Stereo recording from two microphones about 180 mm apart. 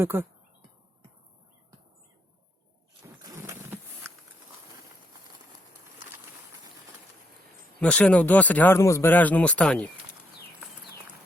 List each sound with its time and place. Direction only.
0.0 s speech: 15° right (ahead or behind)
3.2 s a sound: 20° right (ahead or behind)
7.8 s speech: 5° left (ahead or behind)